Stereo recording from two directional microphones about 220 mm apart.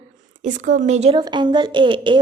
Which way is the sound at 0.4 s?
35° right (ahead or behind).